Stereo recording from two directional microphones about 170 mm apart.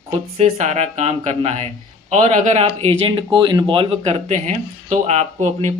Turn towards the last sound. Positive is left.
turn(degrees=-40)  # may be behind; listen again after turning